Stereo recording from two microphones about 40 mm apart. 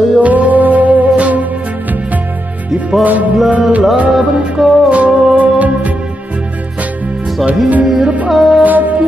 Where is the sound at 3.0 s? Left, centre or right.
Right.